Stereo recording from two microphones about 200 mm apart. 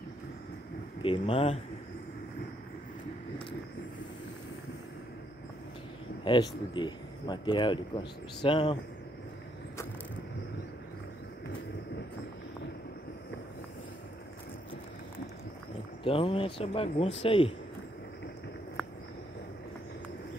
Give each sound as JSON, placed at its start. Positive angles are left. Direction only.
{"t": 1.0, "sound": "speech", "side_deg": 25}
{"t": 6.2, "sound": "speech", "side_deg": 25}
{"t": 16.0, "sound": "speech", "side_deg": 25}